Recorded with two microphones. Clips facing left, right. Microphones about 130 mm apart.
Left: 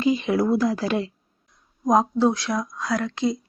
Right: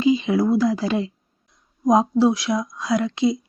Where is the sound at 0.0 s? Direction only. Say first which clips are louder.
Right 2 dB; 20° right (ahead or behind).